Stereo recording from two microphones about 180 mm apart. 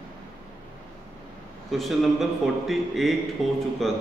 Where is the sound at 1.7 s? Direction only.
Centre (ahead or behind).